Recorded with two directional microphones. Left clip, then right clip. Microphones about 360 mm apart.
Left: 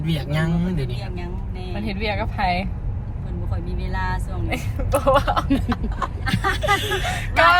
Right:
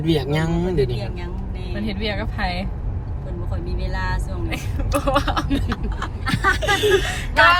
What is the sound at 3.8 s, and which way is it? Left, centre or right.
Speech, centre.